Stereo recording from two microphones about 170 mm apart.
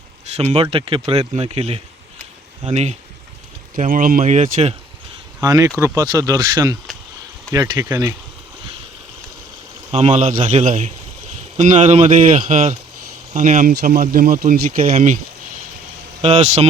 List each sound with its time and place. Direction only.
0.3 s speech: 35° right (ahead or behind)
3.8 s speech: 50° right (ahead or behind)
5.4 s speech: 20° right (ahead or behind)
9.9 s speech: 40° right (ahead or behind)